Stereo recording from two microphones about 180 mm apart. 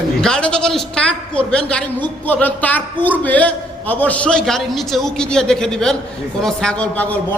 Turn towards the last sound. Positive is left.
turn(degrees=5)  # may be behind; listen again after turning